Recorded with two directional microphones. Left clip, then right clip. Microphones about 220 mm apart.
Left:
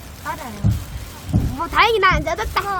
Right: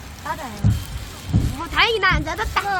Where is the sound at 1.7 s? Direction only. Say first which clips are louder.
Left 3 dB; 55° left (ahead or behind); by 2.6 s 35° left (ahead or behind).